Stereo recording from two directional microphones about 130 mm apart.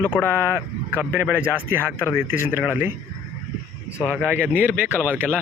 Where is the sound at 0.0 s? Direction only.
15° left (ahead or behind).